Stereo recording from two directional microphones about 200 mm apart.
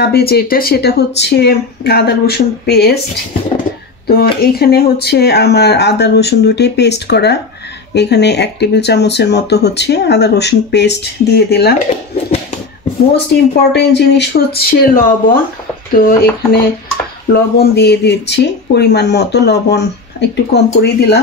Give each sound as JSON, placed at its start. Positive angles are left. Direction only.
{"t": 0.0, "sound": "speech", "side_deg": 50}
{"t": 4.4, "sound": "speech", "side_deg": 50}
{"t": 13.3, "sound": "speech", "side_deg": 55}